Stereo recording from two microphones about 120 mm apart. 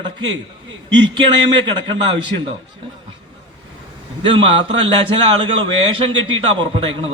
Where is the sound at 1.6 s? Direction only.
45° right (ahead or behind).